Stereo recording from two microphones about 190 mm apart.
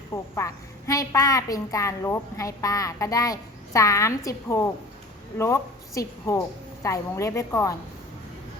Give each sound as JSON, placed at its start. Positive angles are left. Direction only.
{"t": 0.1, "sound": "a woman's voice", "side_deg": 15}